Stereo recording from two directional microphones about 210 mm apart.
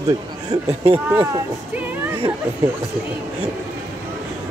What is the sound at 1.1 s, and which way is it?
Speech, 10° right (ahead or behind).